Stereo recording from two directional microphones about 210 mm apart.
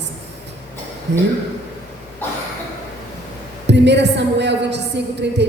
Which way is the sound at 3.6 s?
55° right (ahead or behind).